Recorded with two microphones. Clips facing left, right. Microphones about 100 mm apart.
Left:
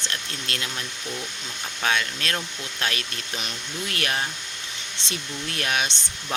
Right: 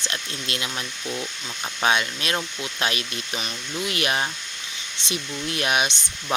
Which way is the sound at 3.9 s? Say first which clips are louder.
Right 2 dB; 15° right (ahead or behind).